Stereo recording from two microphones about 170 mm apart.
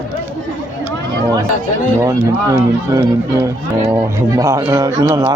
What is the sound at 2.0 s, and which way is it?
Speech, 20° right (ahead or behind).